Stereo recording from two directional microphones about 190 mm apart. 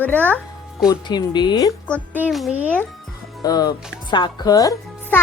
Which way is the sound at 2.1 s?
5° right (ahead or behind).